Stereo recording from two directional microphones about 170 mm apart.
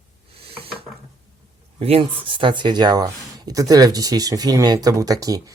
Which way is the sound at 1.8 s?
35° right (ahead or behind).